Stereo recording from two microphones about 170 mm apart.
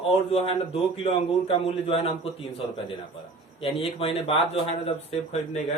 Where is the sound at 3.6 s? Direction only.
35° left (ahead or behind).